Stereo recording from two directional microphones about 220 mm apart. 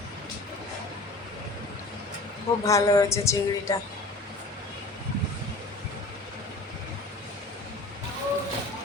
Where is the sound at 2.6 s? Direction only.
15° left (ahead or behind).